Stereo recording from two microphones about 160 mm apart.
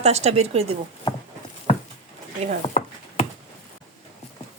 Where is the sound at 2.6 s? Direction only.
35° left (ahead or behind).